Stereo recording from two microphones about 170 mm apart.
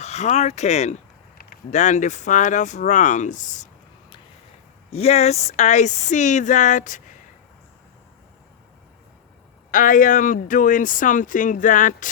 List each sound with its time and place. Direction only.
0.0 s speech: 40° left (ahead or behind)
4.9 s speech: 35° left (ahead or behind)
9.7 s speech: 55° left (ahead or behind)